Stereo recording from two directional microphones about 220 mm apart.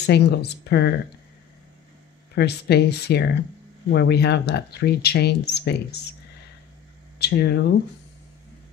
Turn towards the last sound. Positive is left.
turn(degrees=50)  # may be behind; listen again after turning